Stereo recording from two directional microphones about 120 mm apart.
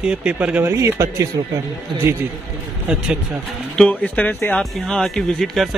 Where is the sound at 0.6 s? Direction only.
25° right (ahead or behind).